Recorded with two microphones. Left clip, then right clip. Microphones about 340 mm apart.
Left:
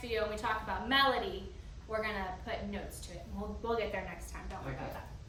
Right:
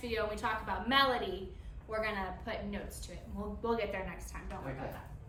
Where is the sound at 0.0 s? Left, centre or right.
Centre.